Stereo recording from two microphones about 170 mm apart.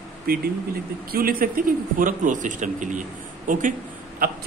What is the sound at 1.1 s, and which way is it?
A man's voice, 60° right (ahead or behind).